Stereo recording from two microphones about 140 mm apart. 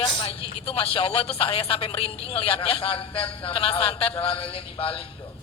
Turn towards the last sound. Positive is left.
turn(degrees=40)  # may be behind; listen again after turning